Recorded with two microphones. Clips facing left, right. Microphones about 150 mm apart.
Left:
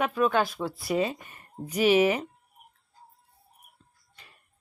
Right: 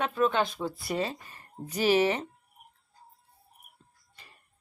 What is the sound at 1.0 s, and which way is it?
Speech, 15° left (ahead or behind).